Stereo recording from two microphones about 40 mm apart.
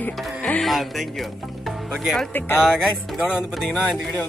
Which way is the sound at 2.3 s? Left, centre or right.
Left.